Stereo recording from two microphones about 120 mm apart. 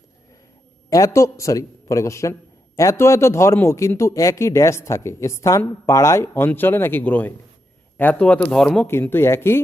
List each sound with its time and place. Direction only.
0.9 s a man's voice: 30° left (ahead or behind); by 8.9 s 5° left (ahead or behind)
8.9 s a man's voice: 20° left (ahead or behind)